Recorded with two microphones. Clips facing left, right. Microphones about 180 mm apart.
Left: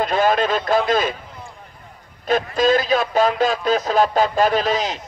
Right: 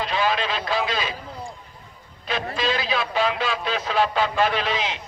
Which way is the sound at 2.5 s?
45° left (ahead or behind).